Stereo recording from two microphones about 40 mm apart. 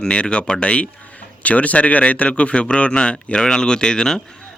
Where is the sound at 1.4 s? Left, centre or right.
Left.